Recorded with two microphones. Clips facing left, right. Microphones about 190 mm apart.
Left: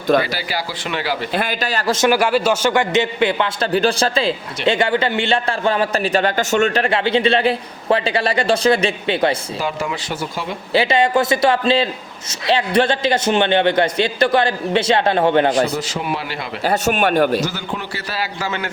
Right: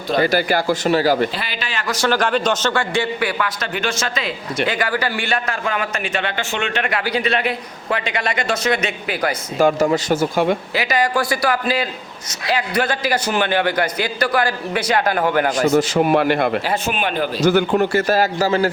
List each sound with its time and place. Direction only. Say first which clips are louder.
0.2 s a man's voice: right 5 dB; 50° right (ahead or behind)
1.3 s speech: left 6 dB; 50° left (ahead or behind)
2.0 s a man's voice: left 2 dB; 10° left (ahead or behind); by 9.3 s 30° left (ahead or behind)
9.6 s a man's voice: right 8 dB; 45° right (ahead or behind)
10.8 s a man's voice: left 9 dB; 25° left (ahead or behind)
15.7 s a man's voice: right 8 dB; 50° right (ahead or behind)
16.6 s speech: left 4 dB; 40° left (ahead or behind)
17.4 s a man's voice: right 10 dB; 50° right (ahead or behind)